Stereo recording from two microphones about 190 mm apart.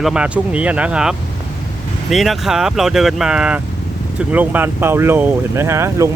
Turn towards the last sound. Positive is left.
turn(degrees=-15)  # may be behind; listen again after turning